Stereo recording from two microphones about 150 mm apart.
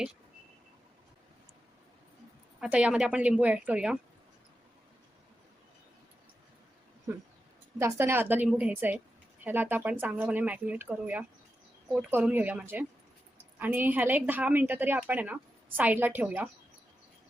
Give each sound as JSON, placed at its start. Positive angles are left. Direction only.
{"t": 2.6, "sound": "a woman's voice", "side_deg": -10}
{"t": 7.8, "sound": "a woman's voice", "side_deg": -15}